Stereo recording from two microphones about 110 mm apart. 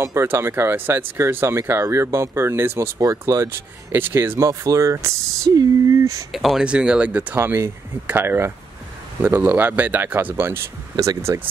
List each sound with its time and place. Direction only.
0.0 s speech: 25° right (ahead or behind)
6.3 s speech: centre (ahead or behind); by 10.6 s 20° right (ahead or behind)
11.0 s speech: 30° right (ahead or behind)